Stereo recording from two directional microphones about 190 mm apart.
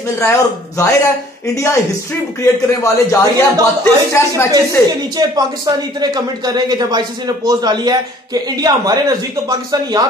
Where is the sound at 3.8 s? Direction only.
15° left (ahead or behind).